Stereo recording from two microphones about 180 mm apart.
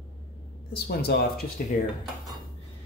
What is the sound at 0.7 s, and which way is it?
Speech, 60° left (ahead or behind).